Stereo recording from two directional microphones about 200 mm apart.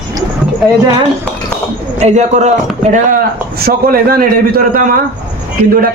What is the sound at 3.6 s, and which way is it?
A man's voice, 50° right (ahead or behind).